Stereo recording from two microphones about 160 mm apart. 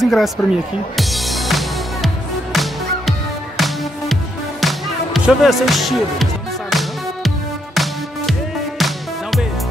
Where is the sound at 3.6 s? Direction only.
Centre (ahead or behind).